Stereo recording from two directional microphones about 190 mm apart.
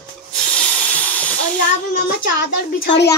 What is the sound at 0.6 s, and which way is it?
Hiss, 5° left (ahead or behind).